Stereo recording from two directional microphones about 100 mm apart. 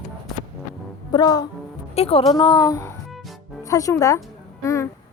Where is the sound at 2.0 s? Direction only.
75° left (ahead or behind).